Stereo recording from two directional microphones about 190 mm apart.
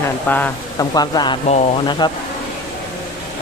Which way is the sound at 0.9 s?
20° left (ahead or behind).